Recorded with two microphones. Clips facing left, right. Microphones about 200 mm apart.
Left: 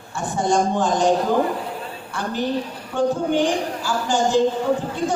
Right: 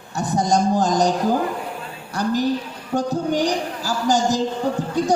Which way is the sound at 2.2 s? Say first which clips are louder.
Right 3 dB; 40° right (ahead or behind).